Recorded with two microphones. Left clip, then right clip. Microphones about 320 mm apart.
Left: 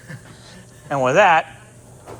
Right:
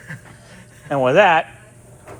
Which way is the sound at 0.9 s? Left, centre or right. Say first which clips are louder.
Right 1 dB; centre.